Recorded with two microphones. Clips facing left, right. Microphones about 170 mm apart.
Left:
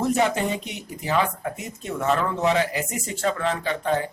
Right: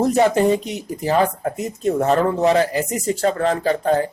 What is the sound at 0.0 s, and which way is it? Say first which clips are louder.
Speech: right 7 dB; 40° right (ahead or behind).